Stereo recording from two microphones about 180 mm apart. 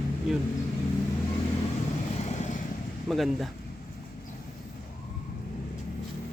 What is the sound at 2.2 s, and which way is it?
Vehicle, 40° left (ahead or behind).